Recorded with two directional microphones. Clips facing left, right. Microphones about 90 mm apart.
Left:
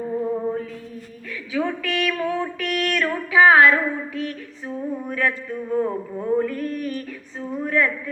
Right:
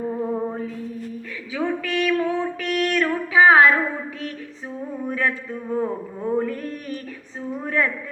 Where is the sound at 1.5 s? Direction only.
30° right (ahead or behind).